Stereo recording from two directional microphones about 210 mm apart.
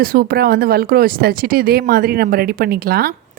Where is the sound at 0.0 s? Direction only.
45° right (ahead or behind).